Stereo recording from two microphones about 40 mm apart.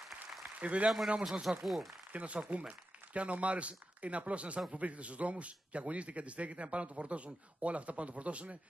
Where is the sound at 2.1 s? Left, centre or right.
Right.